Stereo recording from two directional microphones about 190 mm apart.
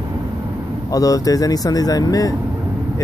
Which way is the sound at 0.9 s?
20° left (ahead or behind).